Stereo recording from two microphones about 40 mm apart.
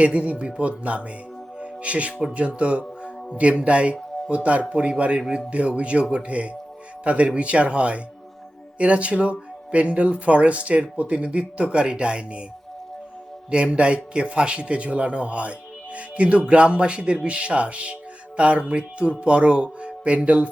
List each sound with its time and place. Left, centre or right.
0.0 s speech: right
1.5 s music: right
2.3 s a man's voice: right
13.5 s a man's voice: right